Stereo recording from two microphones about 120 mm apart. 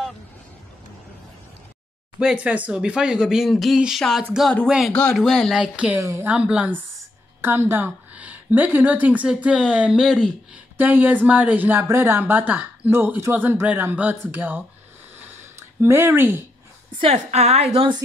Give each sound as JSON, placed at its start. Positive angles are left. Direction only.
{"t": 2.1, "sound": "a woman's voice", "side_deg": -10}
{"t": 5.9, "sound": "speech", "side_deg": -20}
{"t": 6.3, "sound": "a woman's voice", "side_deg": -10}
{"t": 15.8, "sound": "speech", "side_deg": -20}
{"t": 17.0, "sound": "a woman's voice", "side_deg": -65}